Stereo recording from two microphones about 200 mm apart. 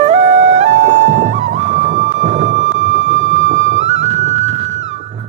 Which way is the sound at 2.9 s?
75° right (ahead or behind).